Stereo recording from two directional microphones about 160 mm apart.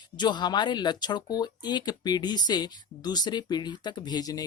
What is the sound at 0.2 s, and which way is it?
Speech, 25° left (ahead or behind).